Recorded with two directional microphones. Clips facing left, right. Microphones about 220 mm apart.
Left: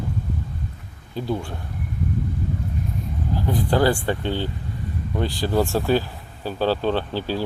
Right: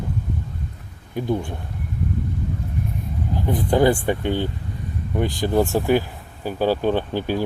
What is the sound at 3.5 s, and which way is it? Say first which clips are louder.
Speech: right 2 dB; 20° right (ahead or behind).